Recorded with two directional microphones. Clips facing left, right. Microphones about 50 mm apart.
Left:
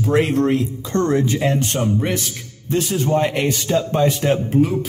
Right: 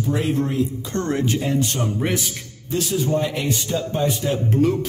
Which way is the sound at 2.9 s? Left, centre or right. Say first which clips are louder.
Left 3 dB; left.